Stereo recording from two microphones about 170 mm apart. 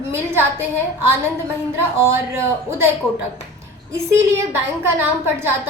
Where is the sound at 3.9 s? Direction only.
15° right (ahead or behind).